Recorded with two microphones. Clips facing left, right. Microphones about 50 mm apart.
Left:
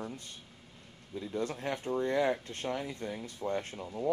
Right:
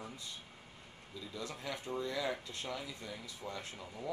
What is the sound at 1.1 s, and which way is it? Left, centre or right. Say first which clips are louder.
Speech: left 9 dB; left.